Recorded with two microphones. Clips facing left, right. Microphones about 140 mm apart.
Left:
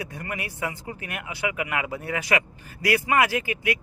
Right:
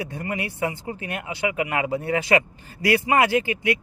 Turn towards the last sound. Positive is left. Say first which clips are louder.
# right 4 dB
turn(degrees=-25)  # may be behind; listen again after turning